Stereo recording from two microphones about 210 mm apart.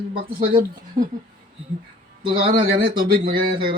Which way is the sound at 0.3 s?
45° right (ahead or behind).